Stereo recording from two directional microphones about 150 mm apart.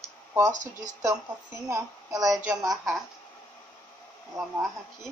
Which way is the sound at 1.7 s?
25° right (ahead or behind).